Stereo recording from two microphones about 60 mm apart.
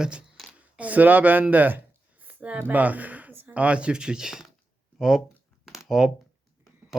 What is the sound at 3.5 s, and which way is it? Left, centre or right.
Speech, right.